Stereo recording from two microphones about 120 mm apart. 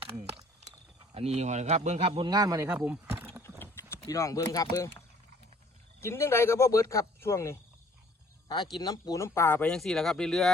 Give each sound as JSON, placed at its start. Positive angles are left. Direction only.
{"t": 1.1, "sound": "speech", "side_deg": -60}
{"t": 2.2, "sound": "speech", "side_deg": -35}
{"t": 2.7, "sound": "a sound", "side_deg": -15}
{"t": 3.6, "sound": "clip-clop", "side_deg": 20}
{"t": 4.0, "sound": "speech", "side_deg": 30}
{"t": 8.7, "sound": "speech", "side_deg": 30}